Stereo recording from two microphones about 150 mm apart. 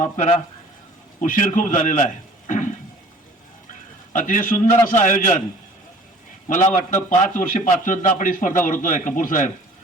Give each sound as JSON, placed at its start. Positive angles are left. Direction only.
{"t": 0.0, "sound": "a man's voice", "side_deg": 50}
{"t": 2.5, "sound": "a sound", "side_deg": 55}
{"t": 4.1, "sound": "a man's voice", "side_deg": 60}
{"t": 6.5, "sound": "a man's voice", "side_deg": 55}